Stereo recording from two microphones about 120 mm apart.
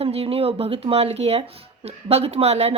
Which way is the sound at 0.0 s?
55° right (ahead or behind).